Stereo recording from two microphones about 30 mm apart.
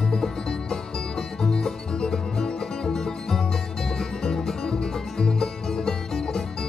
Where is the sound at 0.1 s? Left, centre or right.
Centre.